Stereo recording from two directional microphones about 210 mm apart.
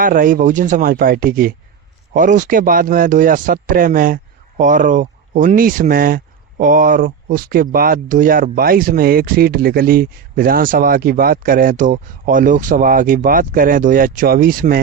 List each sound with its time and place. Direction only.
0.0 s speech: 40° right (ahead or behind)